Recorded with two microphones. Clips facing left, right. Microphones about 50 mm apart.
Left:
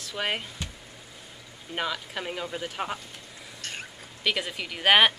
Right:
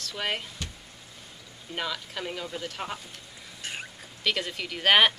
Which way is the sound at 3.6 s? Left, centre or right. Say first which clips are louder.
Right 1 dB; centre.